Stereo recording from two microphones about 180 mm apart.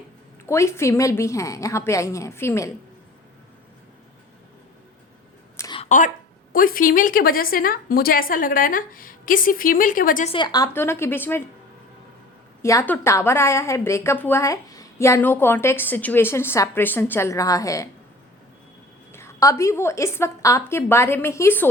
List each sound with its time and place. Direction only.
0.4 s a woman's voice: 15° left (ahead or behind)
5.5 s a sound: 20° left (ahead or behind)
5.8 s a sound: 45° left (ahead or behind)
6.5 s a woman's voice: 50° left (ahead or behind)
10.3 s a woman's voice: 25° left (ahead or behind)
12.6 s a woman's voice: 15° left (ahead or behind)
19.1 s a woman's voice: 15° left (ahead or behind)